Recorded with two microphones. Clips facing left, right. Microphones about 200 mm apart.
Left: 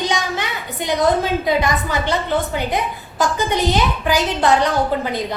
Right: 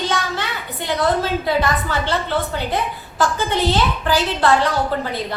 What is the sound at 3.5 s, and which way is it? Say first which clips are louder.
A woman's voice: left 1 dB; 15° left (ahead or behind).